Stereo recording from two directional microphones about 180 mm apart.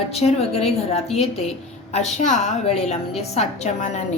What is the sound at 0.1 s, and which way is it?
A woman's voice, 35° left (ahead or behind).